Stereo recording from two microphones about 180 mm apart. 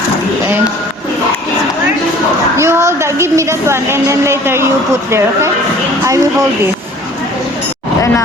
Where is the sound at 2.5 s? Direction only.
15° right (ahead or behind).